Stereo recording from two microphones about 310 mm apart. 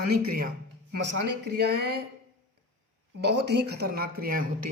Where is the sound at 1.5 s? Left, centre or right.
Right.